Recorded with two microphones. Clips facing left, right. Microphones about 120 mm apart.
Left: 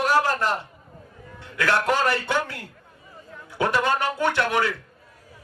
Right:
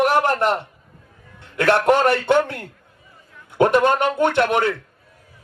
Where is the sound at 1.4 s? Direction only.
60° right (ahead or behind).